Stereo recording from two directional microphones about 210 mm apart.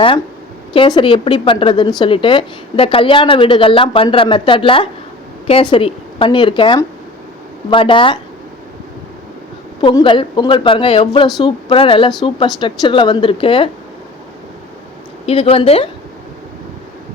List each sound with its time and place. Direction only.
0.7 s a woman's voice: 25° left (ahead or behind)
9.8 s a woman's voice: 25° left (ahead or behind)
15.3 s a woman's voice: 25° left (ahead or behind)